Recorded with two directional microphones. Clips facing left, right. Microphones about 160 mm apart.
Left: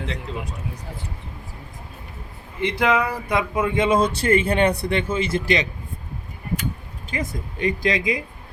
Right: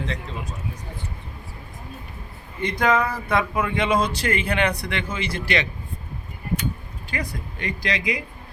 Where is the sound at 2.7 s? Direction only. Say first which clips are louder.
Even; 10° left (ahead or behind).